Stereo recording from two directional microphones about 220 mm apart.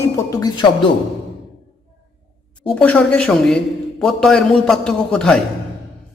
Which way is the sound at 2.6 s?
5° left (ahead or behind).